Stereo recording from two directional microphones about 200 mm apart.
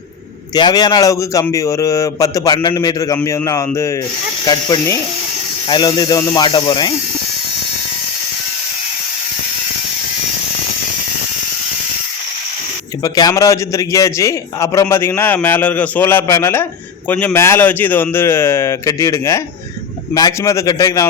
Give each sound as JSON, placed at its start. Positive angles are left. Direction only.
{"t": 0.5, "sound": "a man's voice", "side_deg": 20}
{"t": 13.0, "sound": "a man's voice", "side_deg": 20}